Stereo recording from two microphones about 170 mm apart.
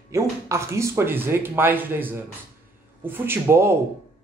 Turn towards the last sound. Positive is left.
turn(degrees=-15)  # may be behind; listen again after turning